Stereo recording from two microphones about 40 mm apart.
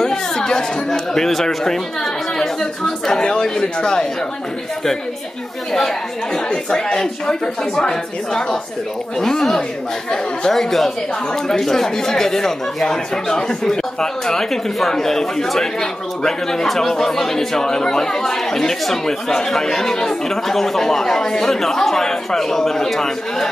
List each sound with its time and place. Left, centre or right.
0.0 s a man's voice: centre
5.7 s a man's voice: centre
9.2 s a man's voice: centre